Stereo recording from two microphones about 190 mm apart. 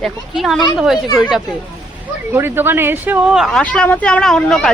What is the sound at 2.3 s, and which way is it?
Speech, 10° right (ahead or behind).